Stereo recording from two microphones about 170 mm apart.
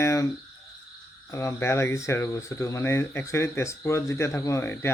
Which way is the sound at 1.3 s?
15° left (ahead or behind).